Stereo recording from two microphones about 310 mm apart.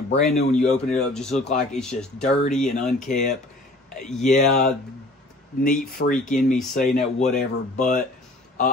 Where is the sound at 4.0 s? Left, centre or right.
Centre.